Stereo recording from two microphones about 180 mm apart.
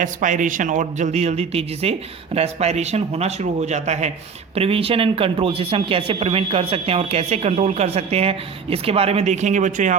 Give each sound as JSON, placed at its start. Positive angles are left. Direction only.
{"t": 0.0, "sound": "speech", "side_deg": -45}